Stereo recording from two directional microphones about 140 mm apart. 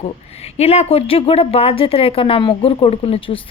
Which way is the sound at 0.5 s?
50° left (ahead or behind).